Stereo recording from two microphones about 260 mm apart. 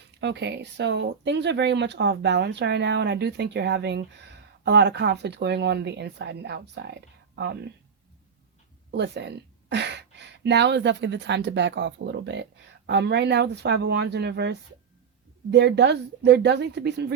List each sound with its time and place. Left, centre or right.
0.2 s speech: right
8.9 s speech: right